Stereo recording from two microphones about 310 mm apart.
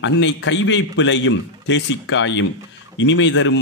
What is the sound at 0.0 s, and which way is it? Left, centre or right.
A man's voice, left.